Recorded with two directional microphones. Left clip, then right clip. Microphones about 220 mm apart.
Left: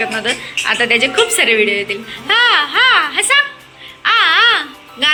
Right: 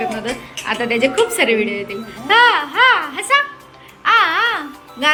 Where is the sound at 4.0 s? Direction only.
10° right (ahead or behind).